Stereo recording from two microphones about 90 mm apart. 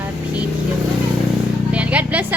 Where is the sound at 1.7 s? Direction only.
15° right (ahead or behind).